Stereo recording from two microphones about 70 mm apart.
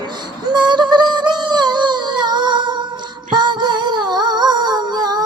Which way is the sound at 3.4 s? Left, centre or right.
Right.